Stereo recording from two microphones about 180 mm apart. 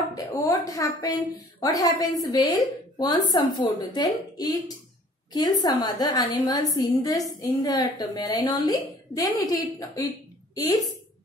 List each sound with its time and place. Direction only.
0.1 s a woman's voice: 20° left (ahead or behind)